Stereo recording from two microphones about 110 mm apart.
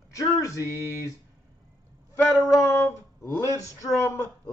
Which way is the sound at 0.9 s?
25° left (ahead or behind).